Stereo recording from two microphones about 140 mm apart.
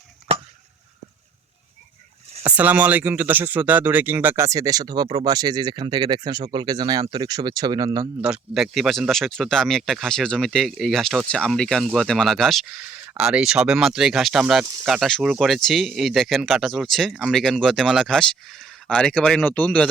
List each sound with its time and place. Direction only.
2.4 s speech: 10° right (ahead or behind); by 8.1 s 25° right (ahead or behind)
8.2 s speech: 5° right (ahead or behind); by 19.9 s 10° left (ahead or behind)